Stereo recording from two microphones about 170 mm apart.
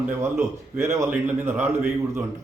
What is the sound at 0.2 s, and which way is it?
A man's voice, 15° right (ahead or behind).